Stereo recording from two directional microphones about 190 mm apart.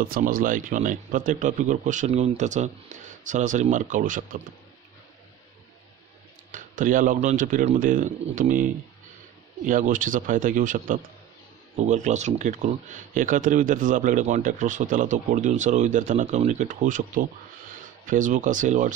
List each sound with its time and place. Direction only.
0.0 s speech: 45° right (ahead or behind)
6.5 s speech: 45° right (ahead or behind)
9.7 s speech: 45° right (ahead or behind)